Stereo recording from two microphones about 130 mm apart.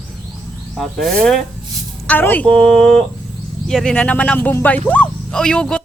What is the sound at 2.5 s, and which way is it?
Speech, 5° left (ahead or behind).